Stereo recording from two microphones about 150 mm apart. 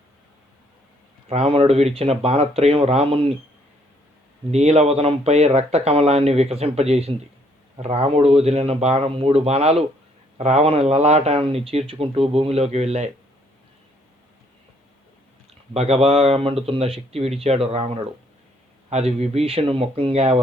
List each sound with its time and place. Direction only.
1.3 s speech: 40° right (ahead or behind)
4.5 s speech: 45° right (ahead or behind)
15.7 s speech: 45° right (ahead or behind)